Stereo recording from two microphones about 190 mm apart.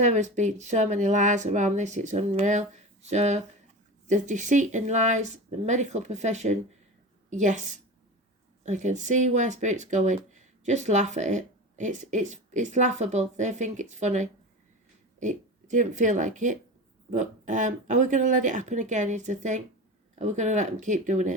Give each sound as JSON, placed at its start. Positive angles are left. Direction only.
{"t": 0.0, "sound": "a woman's voice", "side_deg": -35}
{"t": 8.6, "sound": "speech", "side_deg": -40}